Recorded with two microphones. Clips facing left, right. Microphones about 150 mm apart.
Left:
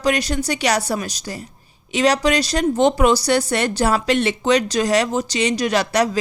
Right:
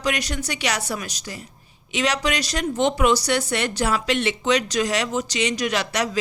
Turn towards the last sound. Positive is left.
turn(degrees=35)  # may be behind; listen again after turning